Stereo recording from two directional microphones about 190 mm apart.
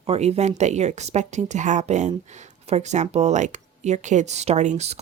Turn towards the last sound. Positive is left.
turn(degrees=-35)  # may be behind; listen again after turning